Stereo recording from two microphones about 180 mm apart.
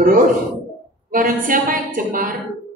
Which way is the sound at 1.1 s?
50° right (ahead or behind).